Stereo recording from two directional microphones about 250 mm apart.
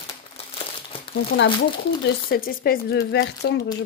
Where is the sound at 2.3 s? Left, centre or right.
Left.